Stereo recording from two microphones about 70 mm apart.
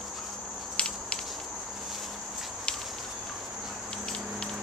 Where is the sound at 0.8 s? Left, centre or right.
Centre.